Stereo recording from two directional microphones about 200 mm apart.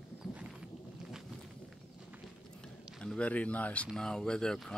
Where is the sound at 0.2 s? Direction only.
5° right (ahead or behind).